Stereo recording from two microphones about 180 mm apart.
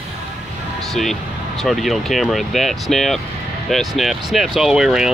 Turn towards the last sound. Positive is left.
turn(degrees=-5)  # may be behind; listen again after turning